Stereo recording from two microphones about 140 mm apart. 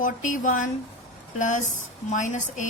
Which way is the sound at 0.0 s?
65° left (ahead or behind).